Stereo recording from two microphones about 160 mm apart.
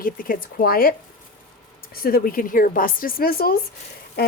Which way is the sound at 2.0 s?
65° left (ahead or behind).